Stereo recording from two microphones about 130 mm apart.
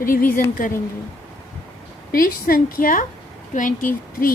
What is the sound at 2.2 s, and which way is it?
Speech, 90° left.